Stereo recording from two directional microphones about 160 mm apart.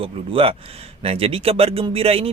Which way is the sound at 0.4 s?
35° right (ahead or behind).